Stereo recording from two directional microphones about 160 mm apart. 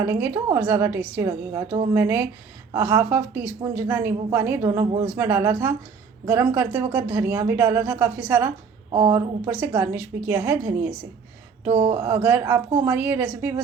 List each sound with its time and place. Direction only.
0.0 s a woman's voice: 15° right (ahead or behind)
11.6 s a sound: 35° right (ahead or behind)
11.9 s speech: 15° right (ahead or behind)